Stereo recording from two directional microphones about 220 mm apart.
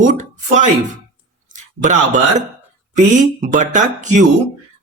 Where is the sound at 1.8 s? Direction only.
35° right (ahead or behind).